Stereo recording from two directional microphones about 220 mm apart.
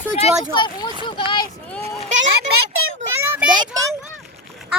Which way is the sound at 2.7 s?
70° right (ahead or behind).